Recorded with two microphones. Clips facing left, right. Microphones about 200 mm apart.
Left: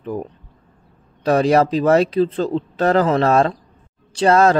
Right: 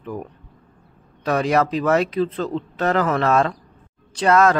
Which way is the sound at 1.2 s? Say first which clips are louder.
Left 4 dB; 30° left (ahead or behind).